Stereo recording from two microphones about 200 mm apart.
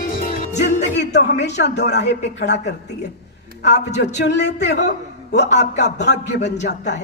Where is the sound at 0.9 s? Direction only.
60° left (ahead or behind).